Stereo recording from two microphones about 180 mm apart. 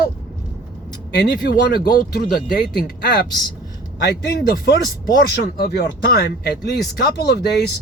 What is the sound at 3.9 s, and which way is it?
Speech, 70° left (ahead or behind).